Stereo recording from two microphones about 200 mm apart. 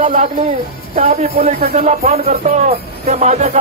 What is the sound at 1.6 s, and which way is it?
Music, 50° right (ahead or behind).